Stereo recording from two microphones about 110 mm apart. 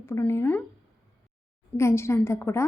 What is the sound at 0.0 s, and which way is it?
Speech, 25° left (ahead or behind).